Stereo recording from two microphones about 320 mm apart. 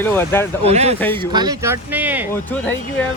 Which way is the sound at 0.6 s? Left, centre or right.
Centre.